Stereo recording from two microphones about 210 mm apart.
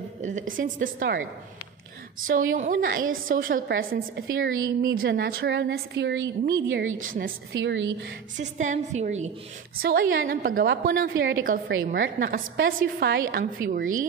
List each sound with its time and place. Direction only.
0.2 s a woman's voice: 35° right (ahead or behind)
2.2 s a woman's voice: 40° right (ahead or behind); by 6.5 s 55° right (ahead or behind)
6.7 s a woman's voice: 70° right (ahead or behind)
8.4 s a woman's voice: 35° right (ahead or behind)
9.8 s a woman's voice: 50° right (ahead or behind)